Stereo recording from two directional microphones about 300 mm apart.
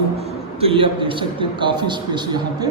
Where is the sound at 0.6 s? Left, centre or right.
Centre.